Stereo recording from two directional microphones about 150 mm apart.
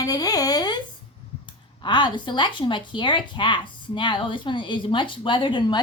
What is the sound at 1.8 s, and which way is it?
A woman's voice, 30° left (ahead or behind).